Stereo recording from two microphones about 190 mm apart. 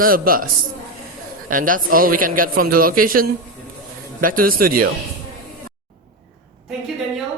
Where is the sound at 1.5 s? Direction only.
45° right (ahead or behind).